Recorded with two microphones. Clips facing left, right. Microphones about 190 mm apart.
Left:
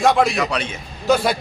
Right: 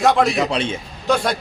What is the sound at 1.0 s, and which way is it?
Speech, 5° left (ahead or behind).